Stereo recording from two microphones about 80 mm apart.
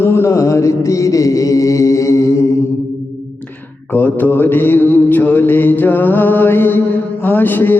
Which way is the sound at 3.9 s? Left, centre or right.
Left.